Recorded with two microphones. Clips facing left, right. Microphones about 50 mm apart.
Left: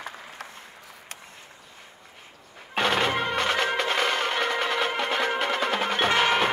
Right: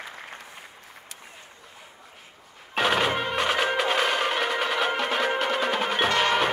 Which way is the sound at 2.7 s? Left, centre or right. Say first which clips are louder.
Right 1 dB; centre.